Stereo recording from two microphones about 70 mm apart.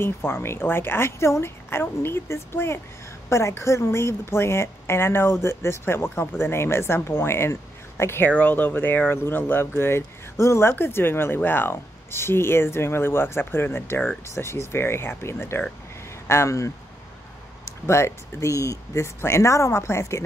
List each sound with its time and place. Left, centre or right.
0.0 s speech: left
8.3 s speech: left
17.8 s speech: left